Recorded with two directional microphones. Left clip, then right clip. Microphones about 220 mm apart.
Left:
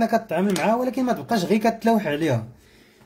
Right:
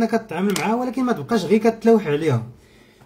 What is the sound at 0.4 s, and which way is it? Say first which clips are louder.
Speech: even; 30° left (ahead or behind).